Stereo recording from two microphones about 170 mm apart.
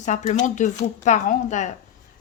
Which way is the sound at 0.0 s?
45° left (ahead or behind).